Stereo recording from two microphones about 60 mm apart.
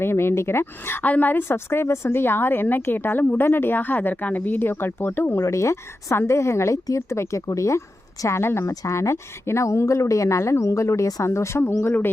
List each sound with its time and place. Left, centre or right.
0.0 s speech: left
1.0 s a woman's voice: left
1.5 s a woman's voice: left
5.4 s a woman's voice: left
8.3 s speech: left
8.8 s a woman's voice: left